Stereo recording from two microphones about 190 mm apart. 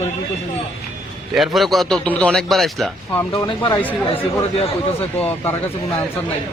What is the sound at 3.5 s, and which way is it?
Speech, 25° left (ahead or behind).